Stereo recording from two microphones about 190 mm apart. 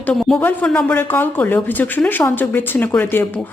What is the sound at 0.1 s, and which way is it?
Speech, 5° left (ahead or behind).